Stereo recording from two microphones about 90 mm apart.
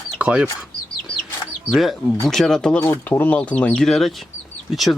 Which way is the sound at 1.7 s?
Centre (ahead or behind).